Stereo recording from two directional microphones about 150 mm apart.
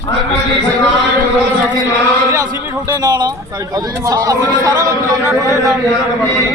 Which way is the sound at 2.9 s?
25° right (ahead or behind).